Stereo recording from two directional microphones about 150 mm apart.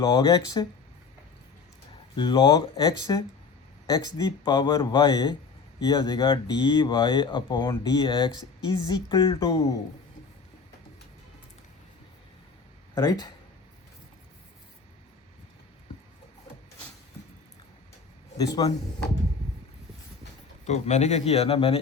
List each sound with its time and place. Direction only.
0.0 s speech: 25° left (ahead or behind)
2.1 s speech: 30° left (ahead or behind)
12.9 s speech: 20° left (ahead or behind)
18.3 s speech: 25° left (ahead or behind)
20.7 s speech: 50° left (ahead or behind)